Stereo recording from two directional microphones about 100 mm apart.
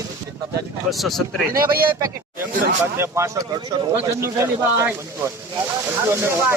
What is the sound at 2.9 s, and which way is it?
Speech, 25° right (ahead or behind).